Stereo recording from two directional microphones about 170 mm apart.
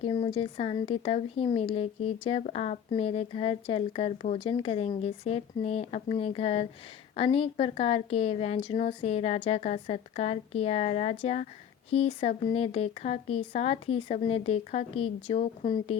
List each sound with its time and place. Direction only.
0.0 s a woman's voice: 30° left (ahead or behind)